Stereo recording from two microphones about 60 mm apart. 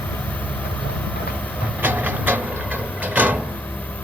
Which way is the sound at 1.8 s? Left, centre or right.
Right.